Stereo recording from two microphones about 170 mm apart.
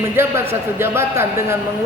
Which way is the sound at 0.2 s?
15° right (ahead or behind).